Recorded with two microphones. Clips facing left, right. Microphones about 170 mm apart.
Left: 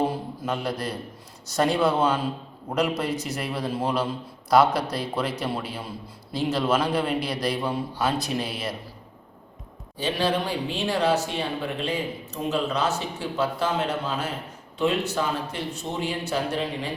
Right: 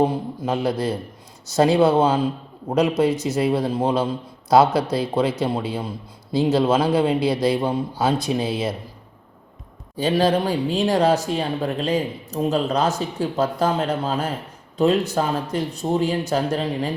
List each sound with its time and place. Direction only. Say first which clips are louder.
0.0 s a man's voice: right 6 dB; 20° right (ahead or behind)
10.0 s speech: right 6 dB; 45° right (ahead or behind)